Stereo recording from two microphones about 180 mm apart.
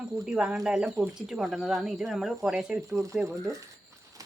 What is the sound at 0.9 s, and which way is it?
Speech, 15° right (ahead or behind).